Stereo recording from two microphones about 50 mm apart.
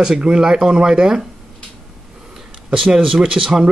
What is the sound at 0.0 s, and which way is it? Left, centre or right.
Speech, centre.